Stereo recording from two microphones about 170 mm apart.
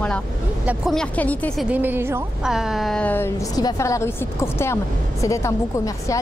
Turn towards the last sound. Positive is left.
turn(degrees=20)  # may be behind; listen again after turning